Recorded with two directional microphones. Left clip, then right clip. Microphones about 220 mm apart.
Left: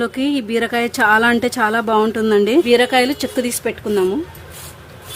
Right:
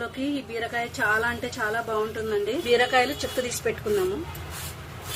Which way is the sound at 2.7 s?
35° left (ahead or behind).